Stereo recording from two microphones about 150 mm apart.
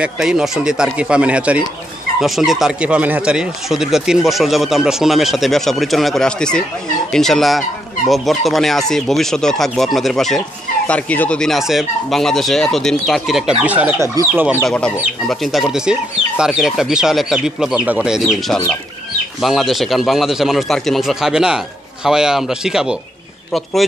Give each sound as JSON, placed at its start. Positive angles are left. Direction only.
{"t": 0.0, "sound": "speech", "side_deg": -5}
{"t": 14.6, "sound": "speech", "side_deg": 5}